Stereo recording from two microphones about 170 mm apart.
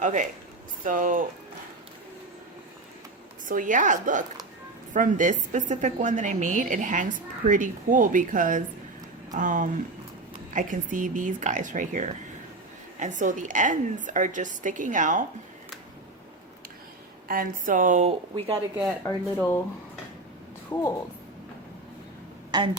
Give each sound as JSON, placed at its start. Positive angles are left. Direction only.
{"t": 0.0, "sound": "a woman's voice", "side_deg": -45}
{"t": 3.5, "sound": "a woman's voice", "side_deg": -50}
{"t": 17.2, "sound": "a woman's voice", "side_deg": -55}
{"t": 19.0, "sound": "speech", "side_deg": 10}
{"t": 20.7, "sound": "speech", "side_deg": 15}
{"t": 22.5, "sound": "speech", "side_deg": -25}